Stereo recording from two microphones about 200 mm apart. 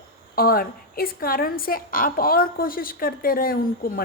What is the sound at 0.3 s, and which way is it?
A woman's voice, 45° left (ahead or behind).